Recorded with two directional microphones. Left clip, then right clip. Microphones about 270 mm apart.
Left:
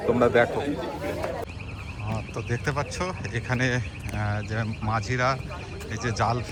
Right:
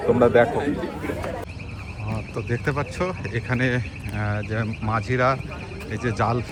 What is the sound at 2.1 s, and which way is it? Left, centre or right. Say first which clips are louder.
Speech: right 3 dB; centre.